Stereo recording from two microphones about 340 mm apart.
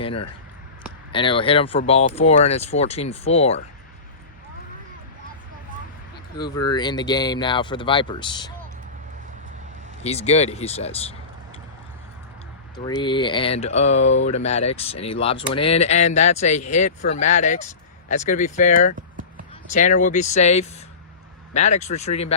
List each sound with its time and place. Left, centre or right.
0.0 s a sound: centre
1.1 s speech: centre
6.3 s speech: centre
10.0 s speech: centre
12.7 s speech: centre